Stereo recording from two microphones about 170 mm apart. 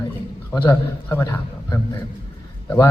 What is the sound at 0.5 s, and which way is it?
A man's voice, 15° left (ahead or behind).